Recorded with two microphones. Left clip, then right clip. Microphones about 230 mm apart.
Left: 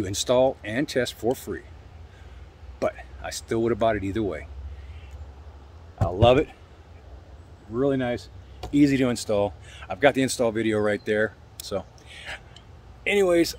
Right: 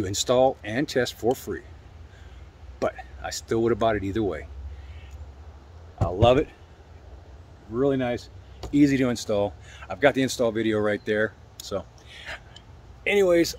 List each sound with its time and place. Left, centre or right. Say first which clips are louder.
0.0 s speech: even; centre
2.8 s speech: even; centre
6.2 s speech: left 1 dB; centre
7.7 s speech: even; centre